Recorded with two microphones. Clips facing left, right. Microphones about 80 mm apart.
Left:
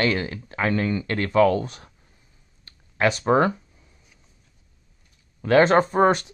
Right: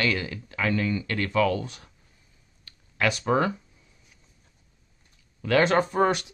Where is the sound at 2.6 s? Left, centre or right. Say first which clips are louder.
Left 4 dB; left.